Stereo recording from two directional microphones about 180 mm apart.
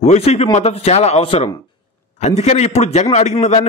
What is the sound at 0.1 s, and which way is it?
A man's voice, 35° left (ahead or behind).